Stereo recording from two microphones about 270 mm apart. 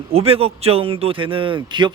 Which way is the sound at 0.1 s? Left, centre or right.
Right.